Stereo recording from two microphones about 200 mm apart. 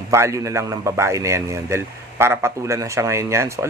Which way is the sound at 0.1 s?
15° right (ahead or behind).